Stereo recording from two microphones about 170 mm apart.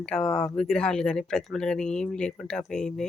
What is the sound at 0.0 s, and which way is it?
Speech, 5° left (ahead or behind).